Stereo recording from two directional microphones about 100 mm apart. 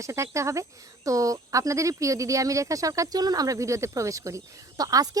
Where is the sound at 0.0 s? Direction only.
30° right (ahead or behind).